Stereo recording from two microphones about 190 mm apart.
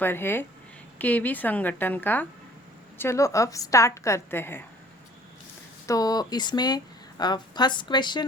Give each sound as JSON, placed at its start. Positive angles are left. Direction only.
{"t": 0.0, "sound": "a woman's voice", "side_deg": 10}
{"t": 5.8, "sound": "speech", "side_deg": 20}